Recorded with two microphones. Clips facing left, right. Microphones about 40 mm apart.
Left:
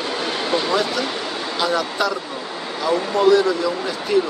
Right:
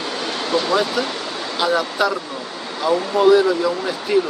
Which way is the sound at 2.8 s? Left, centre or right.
Centre.